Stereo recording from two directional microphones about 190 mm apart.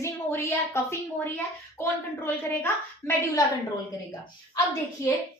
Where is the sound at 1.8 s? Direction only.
10° left (ahead or behind).